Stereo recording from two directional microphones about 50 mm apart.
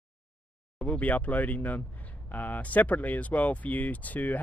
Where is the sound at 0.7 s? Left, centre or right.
Left.